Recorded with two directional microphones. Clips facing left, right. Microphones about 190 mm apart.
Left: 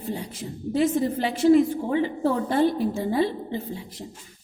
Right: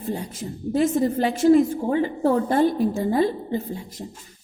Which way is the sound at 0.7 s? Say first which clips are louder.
Right 2 dB; 45° right (ahead or behind).